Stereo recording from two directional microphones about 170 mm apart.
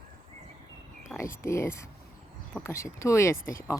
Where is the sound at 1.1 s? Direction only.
15° left (ahead or behind).